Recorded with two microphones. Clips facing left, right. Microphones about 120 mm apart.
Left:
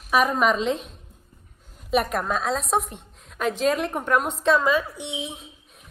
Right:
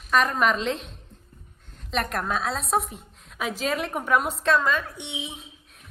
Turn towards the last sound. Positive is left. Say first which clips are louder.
# left 3 dB
turn(degrees=0)  # may be behind; listen again after turning